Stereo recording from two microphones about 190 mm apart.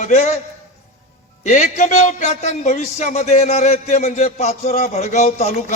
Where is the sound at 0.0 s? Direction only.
40° left (ahead or behind).